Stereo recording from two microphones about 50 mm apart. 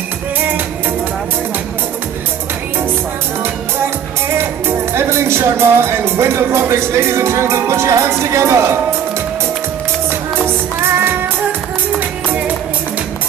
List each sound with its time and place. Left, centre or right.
4.6 s speech: right